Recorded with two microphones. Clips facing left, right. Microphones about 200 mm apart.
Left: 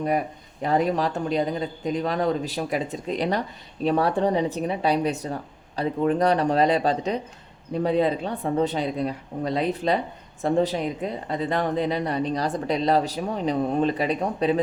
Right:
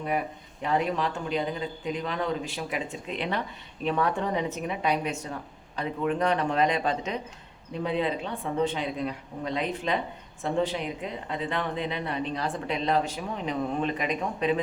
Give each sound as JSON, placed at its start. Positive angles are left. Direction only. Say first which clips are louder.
{"t": 0.6, "sound": "speech", "louder": "left 4 dB", "side_deg": 40}